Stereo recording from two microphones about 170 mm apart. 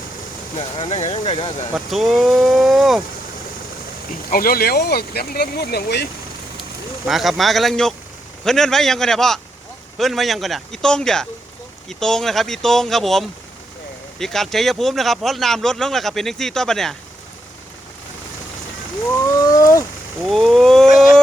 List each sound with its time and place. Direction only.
0.5 s speech: 35° left (ahead or behind)
1.7 s speech: centre (ahead or behind)
4.3 s speech: 60° left (ahead or behind)
7.1 s speech: centre (ahead or behind)
19.4 s a sound: 20° left (ahead or behind)
20.2 s speech: centre (ahead or behind)